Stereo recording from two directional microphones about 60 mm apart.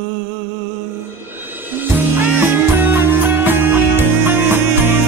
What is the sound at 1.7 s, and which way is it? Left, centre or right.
Music, right.